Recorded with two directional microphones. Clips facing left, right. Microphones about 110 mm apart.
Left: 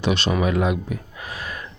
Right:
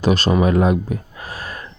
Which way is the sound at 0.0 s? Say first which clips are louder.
Right 5 dB; 40° right (ahead or behind).